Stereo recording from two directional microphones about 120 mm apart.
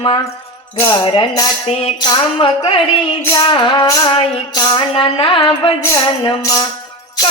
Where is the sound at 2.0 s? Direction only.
35° left (ahead or behind).